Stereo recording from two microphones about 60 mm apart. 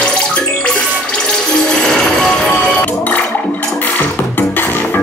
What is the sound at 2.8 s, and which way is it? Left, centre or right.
Music, left.